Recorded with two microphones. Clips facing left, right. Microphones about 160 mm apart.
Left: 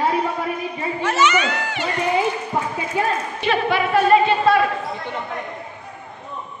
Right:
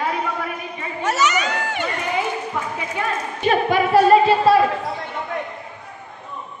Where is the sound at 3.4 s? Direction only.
45° right (ahead or behind).